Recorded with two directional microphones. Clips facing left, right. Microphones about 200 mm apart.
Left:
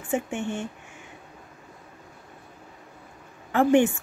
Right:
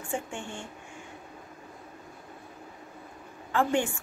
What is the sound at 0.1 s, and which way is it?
Speech, 20° left (ahead or behind).